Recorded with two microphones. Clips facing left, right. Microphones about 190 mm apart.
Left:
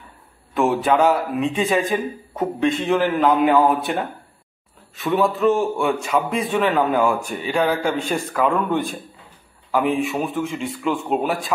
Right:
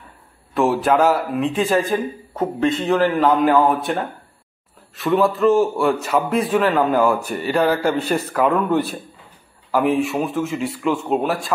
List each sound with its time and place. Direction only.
0.6 s a man's voice: centre (ahead or behind)